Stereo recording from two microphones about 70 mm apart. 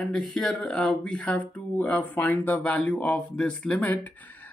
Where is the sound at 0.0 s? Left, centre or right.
Centre.